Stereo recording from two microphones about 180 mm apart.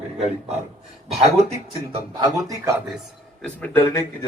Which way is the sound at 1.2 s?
35° right (ahead or behind).